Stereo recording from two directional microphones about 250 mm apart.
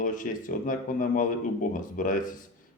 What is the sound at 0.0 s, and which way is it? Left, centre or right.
Speech, left.